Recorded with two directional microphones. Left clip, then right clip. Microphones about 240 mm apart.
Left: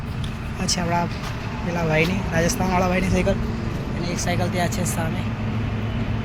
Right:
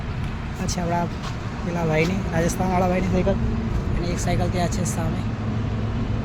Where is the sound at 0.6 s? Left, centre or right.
Centre.